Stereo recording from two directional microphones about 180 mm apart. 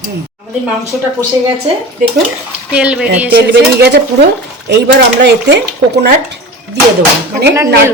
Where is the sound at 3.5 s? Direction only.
70° right (ahead or behind).